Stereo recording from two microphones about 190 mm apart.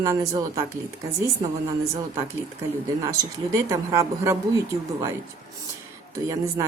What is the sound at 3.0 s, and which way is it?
Speech, 15° right (ahead or behind).